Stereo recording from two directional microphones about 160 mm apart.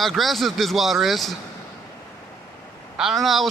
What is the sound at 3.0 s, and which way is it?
Speech, centre (ahead or behind).